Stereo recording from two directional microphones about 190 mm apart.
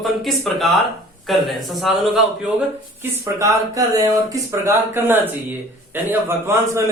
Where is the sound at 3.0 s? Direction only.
15° right (ahead or behind).